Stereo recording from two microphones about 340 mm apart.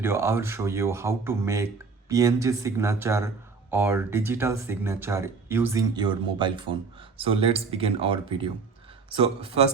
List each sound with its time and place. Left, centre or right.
0.0 s a man's voice: centre